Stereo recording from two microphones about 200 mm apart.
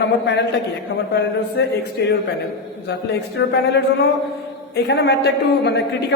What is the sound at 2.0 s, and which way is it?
Speech, 55° left (ahead or behind).